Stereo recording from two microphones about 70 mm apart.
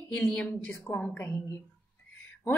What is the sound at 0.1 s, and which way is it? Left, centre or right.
Speech, centre.